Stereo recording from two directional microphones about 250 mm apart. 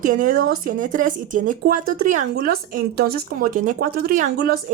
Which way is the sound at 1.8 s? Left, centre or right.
Right.